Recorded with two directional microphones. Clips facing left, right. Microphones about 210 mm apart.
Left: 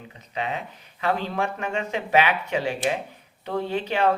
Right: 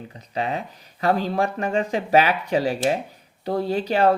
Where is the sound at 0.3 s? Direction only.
35° right (ahead or behind).